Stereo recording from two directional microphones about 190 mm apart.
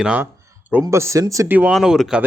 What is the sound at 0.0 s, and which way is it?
Speech, 5° right (ahead or behind).